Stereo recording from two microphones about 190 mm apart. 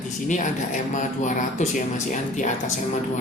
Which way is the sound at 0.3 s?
40° left (ahead or behind).